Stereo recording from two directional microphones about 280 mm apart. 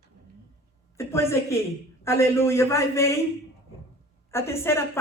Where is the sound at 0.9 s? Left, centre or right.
Centre.